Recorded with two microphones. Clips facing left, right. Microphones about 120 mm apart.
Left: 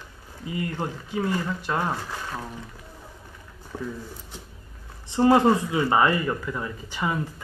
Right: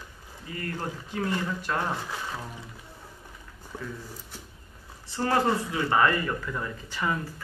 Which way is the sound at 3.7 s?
15° left (ahead or behind).